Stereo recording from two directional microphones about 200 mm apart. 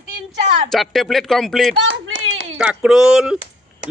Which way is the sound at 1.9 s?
80° right.